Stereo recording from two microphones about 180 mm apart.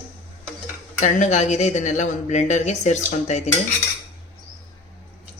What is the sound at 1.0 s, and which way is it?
Speech, 40° left (ahead or behind).